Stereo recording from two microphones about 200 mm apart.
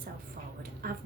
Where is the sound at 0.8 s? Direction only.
45° right (ahead or behind).